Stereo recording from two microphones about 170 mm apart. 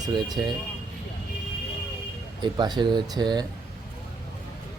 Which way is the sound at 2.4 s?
25° right (ahead or behind).